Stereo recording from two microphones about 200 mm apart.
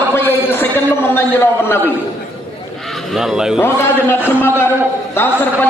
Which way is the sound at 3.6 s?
10° left (ahead or behind).